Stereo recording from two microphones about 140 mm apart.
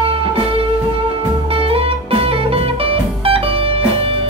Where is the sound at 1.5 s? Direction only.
40° right (ahead or behind).